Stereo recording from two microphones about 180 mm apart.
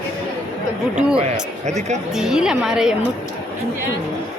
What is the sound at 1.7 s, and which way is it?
Speech, 40° right (ahead or behind).